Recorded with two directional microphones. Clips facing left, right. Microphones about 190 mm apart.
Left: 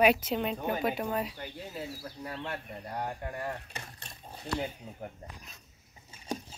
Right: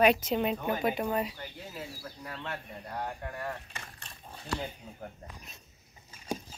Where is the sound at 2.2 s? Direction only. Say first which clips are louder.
Left 2 dB; 20° left (ahead or behind).